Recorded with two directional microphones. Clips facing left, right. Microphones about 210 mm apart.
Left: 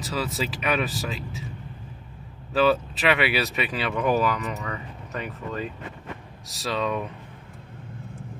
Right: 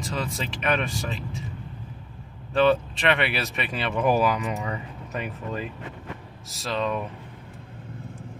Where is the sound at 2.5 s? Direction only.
5° left (ahead or behind).